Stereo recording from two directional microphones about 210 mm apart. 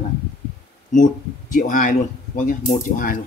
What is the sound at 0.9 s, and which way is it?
Speech, 40° left (ahead or behind).